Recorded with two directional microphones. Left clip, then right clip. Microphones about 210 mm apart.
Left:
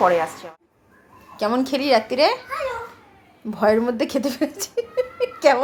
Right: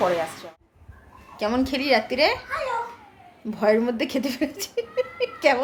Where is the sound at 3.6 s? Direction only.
15° left (ahead or behind).